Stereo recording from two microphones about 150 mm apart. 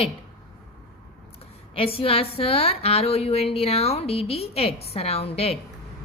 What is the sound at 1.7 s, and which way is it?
A woman's voice, 40° left (ahead or behind).